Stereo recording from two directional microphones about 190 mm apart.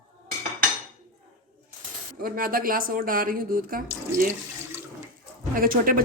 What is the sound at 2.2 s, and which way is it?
Speech, 50° right (ahead or behind).